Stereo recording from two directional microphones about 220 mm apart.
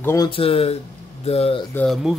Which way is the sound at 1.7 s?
Centre (ahead or behind).